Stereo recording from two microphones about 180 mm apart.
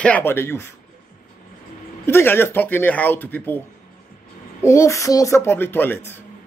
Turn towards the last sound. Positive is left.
turn(degrees=10)  # may be behind; listen again after turning